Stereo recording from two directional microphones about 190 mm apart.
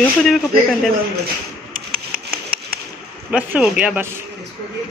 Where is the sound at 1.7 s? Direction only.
50° right (ahead or behind).